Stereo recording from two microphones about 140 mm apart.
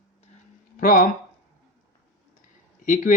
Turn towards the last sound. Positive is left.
turn(degrees=70)  # may be behind; listen again after turning